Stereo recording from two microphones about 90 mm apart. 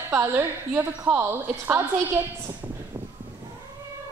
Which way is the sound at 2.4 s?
25° right (ahead or behind).